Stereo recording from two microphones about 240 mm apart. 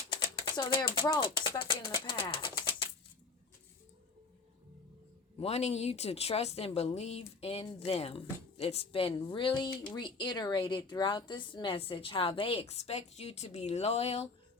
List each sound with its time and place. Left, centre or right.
0.1 s speech: centre
5.4 s a woman's voice: left